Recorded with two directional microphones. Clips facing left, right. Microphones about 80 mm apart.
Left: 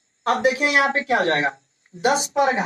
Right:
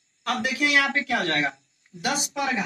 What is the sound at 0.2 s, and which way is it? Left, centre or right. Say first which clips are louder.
Speech: left 6 dB; left.